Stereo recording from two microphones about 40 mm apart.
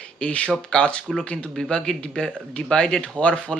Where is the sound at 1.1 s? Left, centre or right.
Centre.